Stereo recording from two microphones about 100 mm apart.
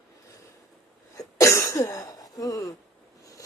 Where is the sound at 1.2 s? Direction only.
35° left (ahead or behind).